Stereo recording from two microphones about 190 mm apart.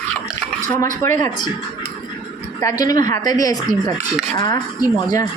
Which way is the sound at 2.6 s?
20° left (ahead or behind).